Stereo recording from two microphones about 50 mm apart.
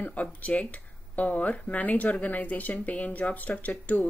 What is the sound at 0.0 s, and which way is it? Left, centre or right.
Speech, left.